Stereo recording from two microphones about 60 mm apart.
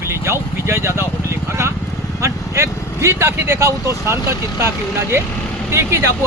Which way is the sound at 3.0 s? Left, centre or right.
Right.